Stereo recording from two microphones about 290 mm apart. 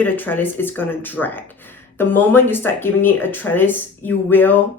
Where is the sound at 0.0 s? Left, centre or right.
Centre.